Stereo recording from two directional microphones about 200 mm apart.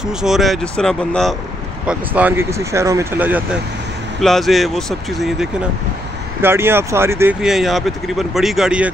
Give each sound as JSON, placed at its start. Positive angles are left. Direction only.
{"t": 0.0, "sound": "speech", "side_deg": 0}
{"t": 1.9, "sound": "speech", "side_deg": -10}
{"t": 6.4, "sound": "speech", "side_deg": -10}
{"t": 7.4, "sound": "speech", "side_deg": 0}